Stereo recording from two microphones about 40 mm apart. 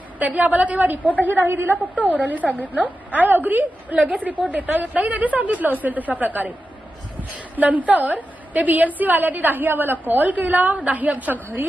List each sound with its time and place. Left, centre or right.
0.2 s a woman's voice: right